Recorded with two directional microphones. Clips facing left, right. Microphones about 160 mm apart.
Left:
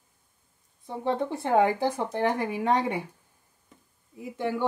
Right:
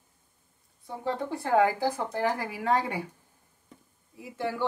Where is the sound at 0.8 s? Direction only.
20° left (ahead or behind).